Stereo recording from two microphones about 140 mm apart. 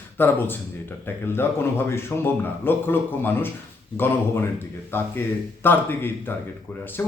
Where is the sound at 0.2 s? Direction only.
15° left (ahead or behind).